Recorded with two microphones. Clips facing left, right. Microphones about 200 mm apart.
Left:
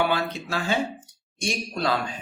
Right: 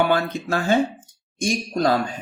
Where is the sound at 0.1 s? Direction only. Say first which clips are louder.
Right 5 dB; 50° right (ahead or behind).